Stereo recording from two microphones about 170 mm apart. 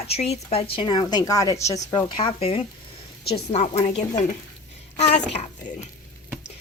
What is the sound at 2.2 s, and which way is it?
A woman's voice, 35° left (ahead or behind).